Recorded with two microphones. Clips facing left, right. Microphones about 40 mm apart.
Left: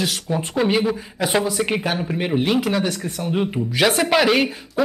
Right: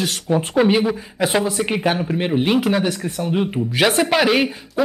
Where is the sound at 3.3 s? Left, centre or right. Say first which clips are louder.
Right 1 dB; centre.